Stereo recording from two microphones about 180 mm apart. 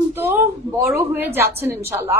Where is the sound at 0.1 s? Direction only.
15° right (ahead or behind).